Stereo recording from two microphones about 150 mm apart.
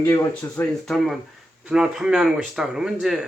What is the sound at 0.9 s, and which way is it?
Speech, centre (ahead or behind).